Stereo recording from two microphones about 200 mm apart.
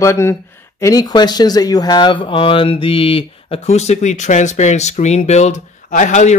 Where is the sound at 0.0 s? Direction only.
15° left (ahead or behind).